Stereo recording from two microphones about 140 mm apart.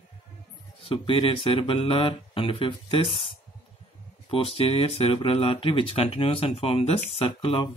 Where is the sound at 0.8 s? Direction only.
40° left (ahead or behind).